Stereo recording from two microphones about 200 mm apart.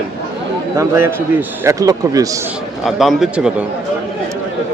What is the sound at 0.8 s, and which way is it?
A man's voice, 10° right (ahead or behind).